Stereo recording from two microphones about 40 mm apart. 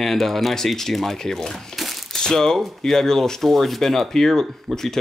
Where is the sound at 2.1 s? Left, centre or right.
Centre.